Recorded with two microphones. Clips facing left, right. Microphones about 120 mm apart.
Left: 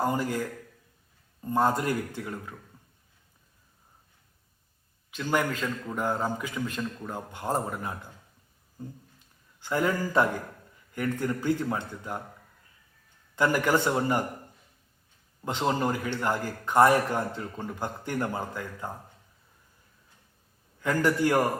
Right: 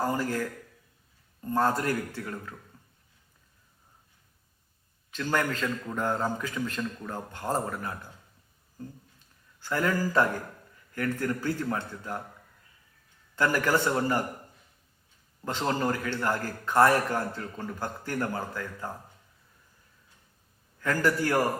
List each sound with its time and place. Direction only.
0.0 s a man's voice: 15° left (ahead or behind)
5.1 s a man's voice: 15° left (ahead or behind)
9.6 s a man's voice: 15° left (ahead or behind)
13.3 s a man's voice: 15° left (ahead or behind)
15.4 s a man's voice: 15° left (ahead or behind)
20.8 s a man's voice: 20° left (ahead or behind)